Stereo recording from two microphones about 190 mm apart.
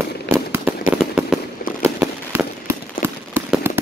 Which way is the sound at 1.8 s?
10° right (ahead or behind).